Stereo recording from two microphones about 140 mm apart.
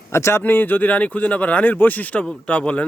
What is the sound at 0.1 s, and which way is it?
Speech, 20° left (ahead or behind).